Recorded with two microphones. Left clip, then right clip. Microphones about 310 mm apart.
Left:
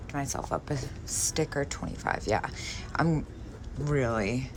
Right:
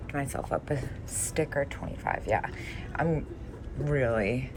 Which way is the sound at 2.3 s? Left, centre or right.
Left.